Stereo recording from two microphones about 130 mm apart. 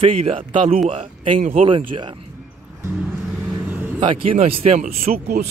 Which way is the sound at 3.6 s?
15° right (ahead or behind).